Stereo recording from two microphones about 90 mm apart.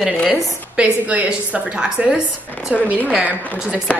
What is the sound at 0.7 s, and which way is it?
A woman's voice, 15° right (ahead or behind).